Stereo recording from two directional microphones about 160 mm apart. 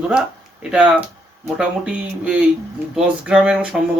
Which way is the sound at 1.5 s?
5° right (ahead or behind).